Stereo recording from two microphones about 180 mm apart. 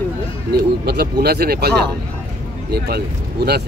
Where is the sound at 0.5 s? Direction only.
60° right (ahead or behind).